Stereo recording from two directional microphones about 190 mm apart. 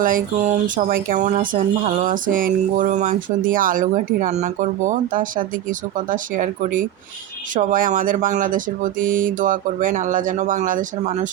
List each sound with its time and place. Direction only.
0.0 s speech: 45° right (ahead or behind)